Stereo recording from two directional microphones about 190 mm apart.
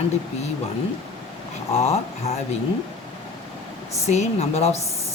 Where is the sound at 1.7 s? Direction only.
35° left (ahead or behind).